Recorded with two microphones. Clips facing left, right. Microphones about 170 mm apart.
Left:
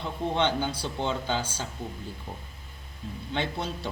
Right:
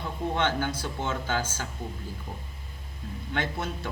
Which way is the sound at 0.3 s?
15° left (ahead or behind).